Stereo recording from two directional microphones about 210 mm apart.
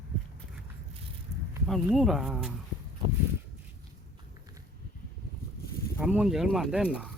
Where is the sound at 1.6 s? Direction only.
Centre (ahead or behind).